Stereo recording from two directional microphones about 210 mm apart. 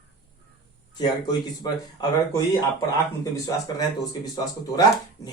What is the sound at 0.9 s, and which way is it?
Speech, 20° left (ahead or behind).